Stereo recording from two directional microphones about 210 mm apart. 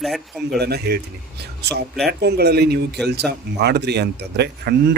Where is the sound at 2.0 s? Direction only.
50° right (ahead or behind).